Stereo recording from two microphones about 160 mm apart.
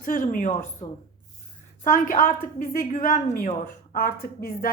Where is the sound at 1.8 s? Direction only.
55° left (ahead or behind).